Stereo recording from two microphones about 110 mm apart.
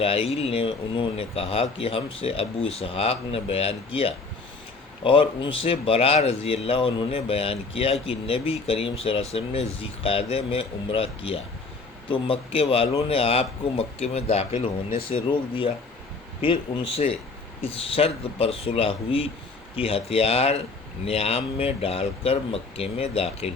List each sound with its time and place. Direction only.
0.0 s speech: 60° left (ahead or behind)